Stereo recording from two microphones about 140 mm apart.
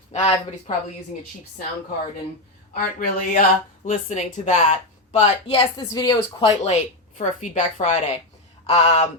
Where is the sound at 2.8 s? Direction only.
75° left (ahead or behind).